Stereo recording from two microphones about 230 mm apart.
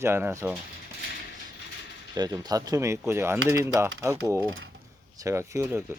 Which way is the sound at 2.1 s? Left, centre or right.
Centre.